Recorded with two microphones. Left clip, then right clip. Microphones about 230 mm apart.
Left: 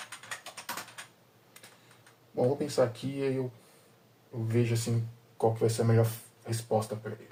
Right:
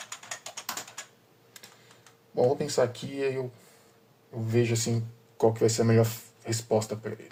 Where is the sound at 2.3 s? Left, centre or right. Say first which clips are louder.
Right 3 dB; right.